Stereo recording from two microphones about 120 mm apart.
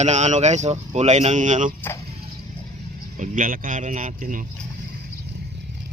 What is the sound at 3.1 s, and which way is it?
Speech, 90° right.